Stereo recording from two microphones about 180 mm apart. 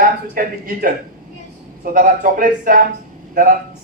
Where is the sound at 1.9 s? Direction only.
50° right (ahead or behind).